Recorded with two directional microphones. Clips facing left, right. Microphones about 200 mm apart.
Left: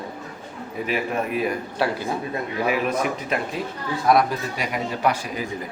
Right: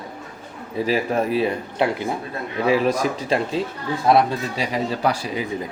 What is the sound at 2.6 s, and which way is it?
Speech, 30° right (ahead or behind).